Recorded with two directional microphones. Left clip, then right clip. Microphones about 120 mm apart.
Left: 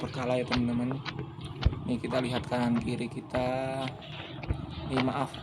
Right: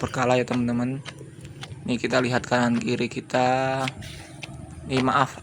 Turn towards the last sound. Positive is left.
turn(degrees=-35)  # may be behind; listen again after turning